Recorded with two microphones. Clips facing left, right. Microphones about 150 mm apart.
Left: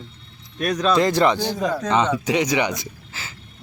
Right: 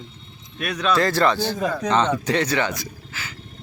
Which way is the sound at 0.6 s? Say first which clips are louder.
Left 3 dB; 35° left (ahead or behind).